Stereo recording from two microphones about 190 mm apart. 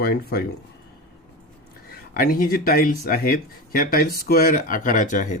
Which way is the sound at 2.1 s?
50° left (ahead or behind).